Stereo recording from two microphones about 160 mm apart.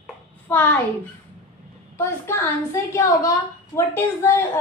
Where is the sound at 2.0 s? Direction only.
15° left (ahead or behind).